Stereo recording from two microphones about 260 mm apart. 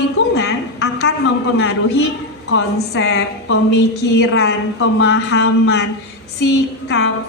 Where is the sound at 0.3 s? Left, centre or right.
Left.